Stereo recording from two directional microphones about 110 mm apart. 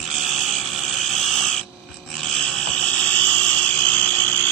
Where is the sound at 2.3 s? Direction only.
5° left (ahead or behind).